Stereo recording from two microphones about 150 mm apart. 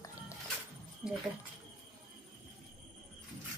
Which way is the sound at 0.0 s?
20° left (ahead or behind).